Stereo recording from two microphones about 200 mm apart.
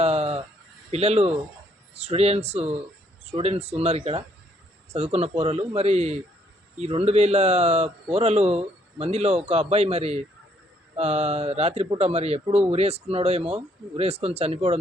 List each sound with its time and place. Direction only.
0.0 s bleat: 30° right (ahead or behind)
0.9 s speech: 30° right (ahead or behind)